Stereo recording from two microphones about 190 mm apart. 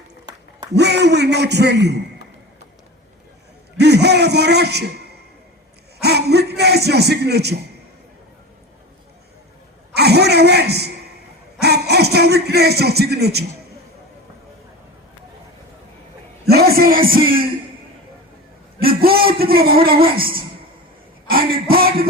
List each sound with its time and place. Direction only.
0.8 s a man's voice: 60° right (ahead or behind)
3.8 s a man's voice: 60° right (ahead or behind)
9.9 s a man's voice: 60° right (ahead or behind)
16.5 s music: 55° right (ahead or behind)
18.8 s a sound: 50° right (ahead or behind)
21.2 s a sound: 50° right (ahead or behind)